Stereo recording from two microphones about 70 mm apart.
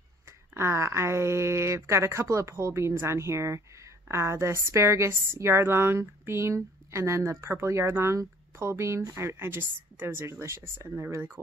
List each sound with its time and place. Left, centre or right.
0.6 s a woman's voice: right